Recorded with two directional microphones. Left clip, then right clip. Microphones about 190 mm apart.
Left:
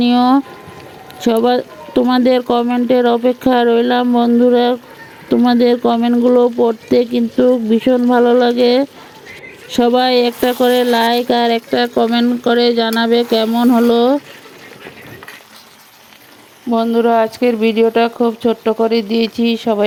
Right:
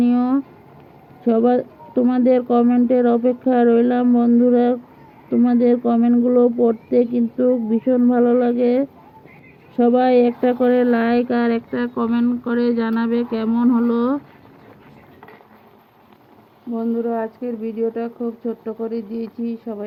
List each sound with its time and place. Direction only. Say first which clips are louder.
0.0 s speech: left 7 dB; 35° left (ahead or behind)
1.2 s speech: left 4 dB; 50° left (ahead or behind); by 14.2 s 30° left (ahead or behind)
16.7 s speech: left 10 dB; 60° left (ahead or behind)